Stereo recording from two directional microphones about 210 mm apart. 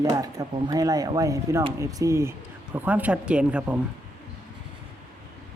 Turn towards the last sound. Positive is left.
turn(degrees=-5)  # may be behind; listen again after turning